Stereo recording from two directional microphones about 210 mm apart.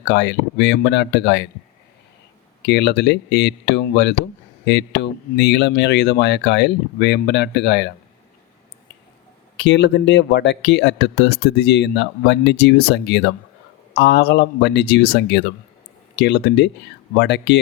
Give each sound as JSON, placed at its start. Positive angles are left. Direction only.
{"t": 0.1, "sound": "speech", "side_deg": 55}
{"t": 2.6, "sound": "speech", "side_deg": 55}
{"t": 9.6, "sound": "speech", "side_deg": 55}